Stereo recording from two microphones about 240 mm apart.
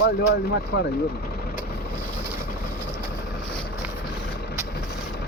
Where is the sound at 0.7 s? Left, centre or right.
Left.